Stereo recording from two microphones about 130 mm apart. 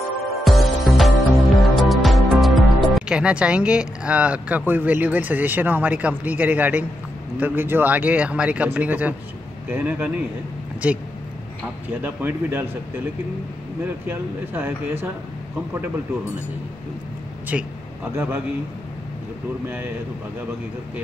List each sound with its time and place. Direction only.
0.4 s music: centre (ahead or behind)
7.3 s speech: 15° right (ahead or behind)
14.0 s speech: 15° right (ahead or behind)
17.5 s speech: 15° right (ahead or behind)